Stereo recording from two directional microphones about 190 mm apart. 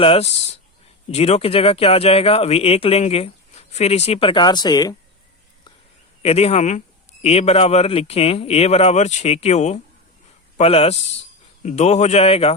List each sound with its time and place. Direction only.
0.0 s speech: 30° left (ahead or behind)
6.2 s speech: 35° left (ahead or behind)